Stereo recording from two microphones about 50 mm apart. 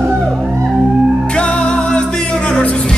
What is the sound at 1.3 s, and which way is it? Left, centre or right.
Music, left.